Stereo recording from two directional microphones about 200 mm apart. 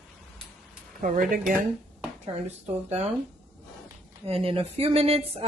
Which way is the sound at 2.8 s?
35° right (ahead or behind).